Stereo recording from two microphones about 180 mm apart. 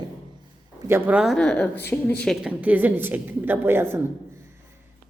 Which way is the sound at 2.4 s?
10° right (ahead or behind).